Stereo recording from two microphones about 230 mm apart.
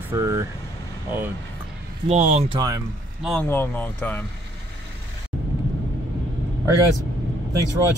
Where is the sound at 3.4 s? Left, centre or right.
Centre.